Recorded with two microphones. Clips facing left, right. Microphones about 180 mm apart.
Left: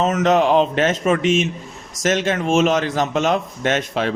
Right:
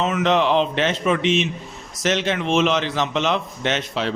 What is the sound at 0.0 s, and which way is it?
A man's voice, 40° left (ahead or behind).